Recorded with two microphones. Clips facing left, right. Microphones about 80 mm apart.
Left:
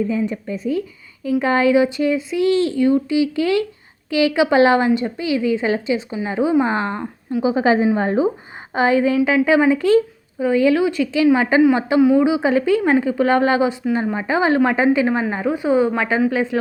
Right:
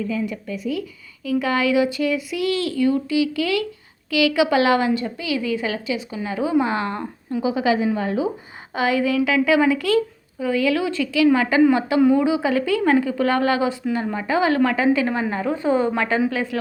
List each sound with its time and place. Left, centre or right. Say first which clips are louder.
0.0 s a woman's voice: left 4 dB; left
6.9 s speech: left 2 dB; centre
7.4 s a woman's voice: left 4 dB; left